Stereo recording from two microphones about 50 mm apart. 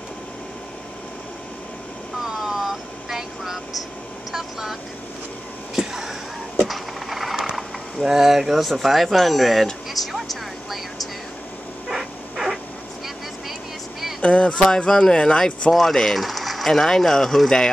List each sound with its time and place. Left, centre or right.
2.2 s vehicle: centre
5.8 s a sound: centre
7.5 s speech: centre
10.1 s vehicle: centre
11.9 s dog: centre
14.2 s speech: left
14.9 s speech: centre